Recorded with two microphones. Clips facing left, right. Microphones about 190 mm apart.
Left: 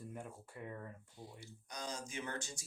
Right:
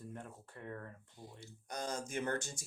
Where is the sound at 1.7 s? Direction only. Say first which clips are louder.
Right 5 dB; 50° right (ahead or behind).